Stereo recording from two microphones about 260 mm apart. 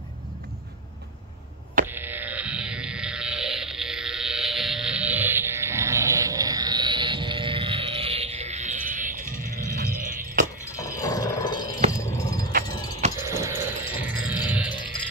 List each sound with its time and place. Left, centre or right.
1.9 s burping: centre; by 9.2 s right
9.2 s music: centre
10.0 s music: right
10.6 s a sound: centre
12.6 s music: centre
13.2 s music: centre